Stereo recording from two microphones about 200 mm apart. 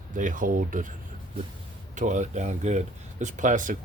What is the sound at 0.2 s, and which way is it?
Speech, 40° right (ahead or behind).